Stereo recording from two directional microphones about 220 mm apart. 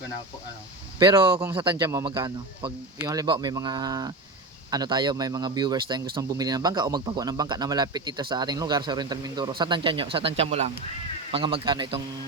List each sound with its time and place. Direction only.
0.9 s speech: 20° right (ahead or behind)